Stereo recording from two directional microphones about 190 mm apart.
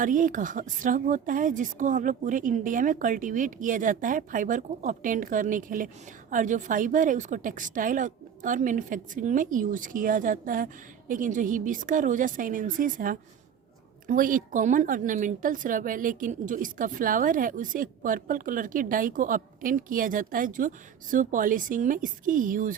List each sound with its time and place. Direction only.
0.0 s a woman's voice: 45° right (ahead or behind)